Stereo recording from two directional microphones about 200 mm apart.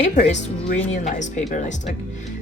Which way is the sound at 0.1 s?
35° left (ahead or behind).